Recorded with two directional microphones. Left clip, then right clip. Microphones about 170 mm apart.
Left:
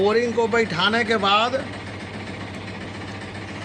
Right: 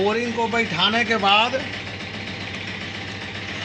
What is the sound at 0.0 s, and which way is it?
Speech, 15° left (ahead or behind).